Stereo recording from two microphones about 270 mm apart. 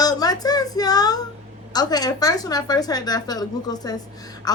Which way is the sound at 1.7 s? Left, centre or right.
Centre.